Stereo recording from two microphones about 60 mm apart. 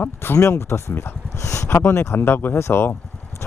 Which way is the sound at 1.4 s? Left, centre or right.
Left.